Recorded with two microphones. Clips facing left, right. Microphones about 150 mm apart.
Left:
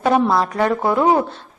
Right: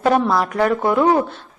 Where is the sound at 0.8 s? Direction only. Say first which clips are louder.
Even; 10° left (ahead or behind).